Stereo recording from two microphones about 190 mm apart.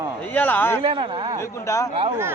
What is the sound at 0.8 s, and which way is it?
Speech, 25° right (ahead or behind).